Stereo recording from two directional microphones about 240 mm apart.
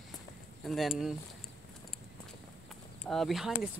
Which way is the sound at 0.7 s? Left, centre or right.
Centre.